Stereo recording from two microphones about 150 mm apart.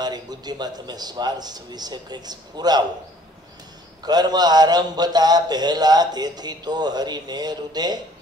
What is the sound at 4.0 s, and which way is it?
A man's voice, 25° right (ahead or behind).